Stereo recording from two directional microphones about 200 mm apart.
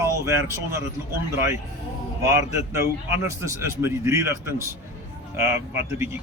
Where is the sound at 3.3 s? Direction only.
15° right (ahead or behind).